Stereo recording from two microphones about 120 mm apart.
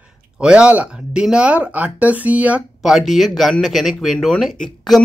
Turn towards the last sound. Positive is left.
turn(degrees=0)  # may be behind; listen again after turning